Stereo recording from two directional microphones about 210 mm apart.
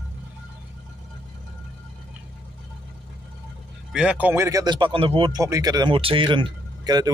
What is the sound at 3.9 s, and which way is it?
Speech, 5° right (ahead or behind).